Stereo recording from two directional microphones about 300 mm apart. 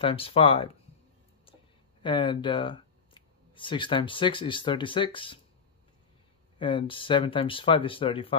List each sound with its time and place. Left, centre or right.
0.0 s speech: centre
2.0 s speech: centre
6.6 s speech: centre